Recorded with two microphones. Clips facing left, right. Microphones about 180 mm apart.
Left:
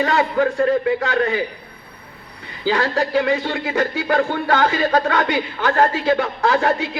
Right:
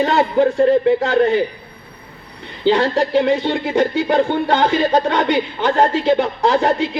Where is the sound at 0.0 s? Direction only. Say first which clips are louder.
Right 3 dB; 30° right (ahead or behind).